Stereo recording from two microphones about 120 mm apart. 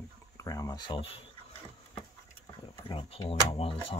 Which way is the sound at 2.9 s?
50° left (ahead or behind).